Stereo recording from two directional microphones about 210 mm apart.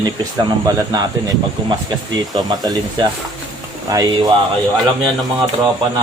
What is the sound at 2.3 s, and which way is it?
Speech, 20° right (ahead or behind).